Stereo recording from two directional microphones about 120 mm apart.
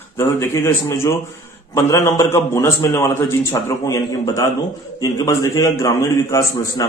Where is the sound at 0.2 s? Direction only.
20° left (ahead or behind).